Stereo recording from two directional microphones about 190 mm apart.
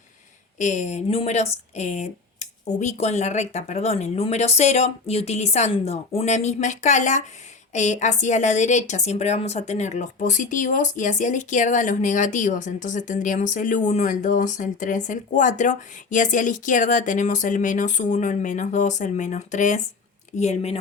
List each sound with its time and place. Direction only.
0.6 s a woman's voice: 40° left (ahead or behind)